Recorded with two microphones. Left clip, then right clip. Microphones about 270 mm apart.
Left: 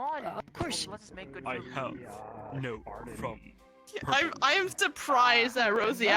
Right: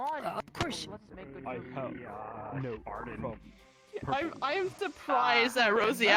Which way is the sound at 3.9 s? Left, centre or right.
Left.